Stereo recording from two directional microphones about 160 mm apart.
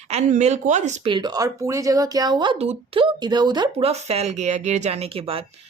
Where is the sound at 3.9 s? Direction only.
40° right (ahead or behind).